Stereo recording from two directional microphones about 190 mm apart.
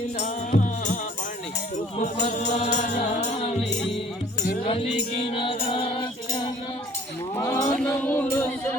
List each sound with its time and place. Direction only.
0.2 s music: 40° left (ahead or behind)
4.6 s music: 30° left (ahead or behind)
7.3 s a sound: 15° left (ahead or behind)